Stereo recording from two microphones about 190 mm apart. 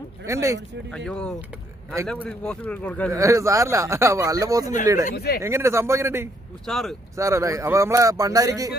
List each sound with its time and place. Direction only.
0.3 s speech: 15° right (ahead or behind)
0.9 s speech: 5° left (ahead or behind)
3.1 s speech: 15° right (ahead or behind)
5.1 s speech: 55° left (ahead or behind)
5.4 s speech: 15° right (ahead or behind)
6.6 s speech: centre (ahead or behind)
7.2 s speech: 15° right (ahead or behind)